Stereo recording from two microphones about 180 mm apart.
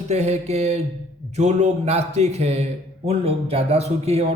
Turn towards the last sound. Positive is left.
turn(degrees=-35)  # may be behind; listen again after turning